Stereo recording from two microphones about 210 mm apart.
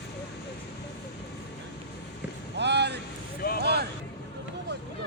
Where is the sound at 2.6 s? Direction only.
55° right (ahead or behind).